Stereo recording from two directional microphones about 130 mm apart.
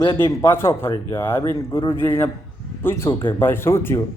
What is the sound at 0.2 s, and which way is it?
Speech, 20° left (ahead or behind).